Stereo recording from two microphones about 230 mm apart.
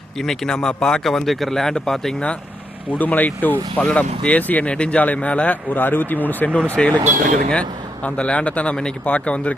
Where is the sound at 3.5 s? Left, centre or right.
Centre.